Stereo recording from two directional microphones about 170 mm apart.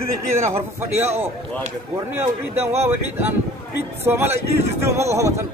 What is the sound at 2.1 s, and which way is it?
Speech, 15° right (ahead or behind).